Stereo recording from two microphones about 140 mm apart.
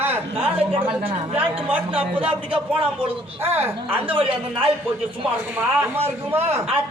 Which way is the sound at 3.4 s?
15° right (ahead or behind).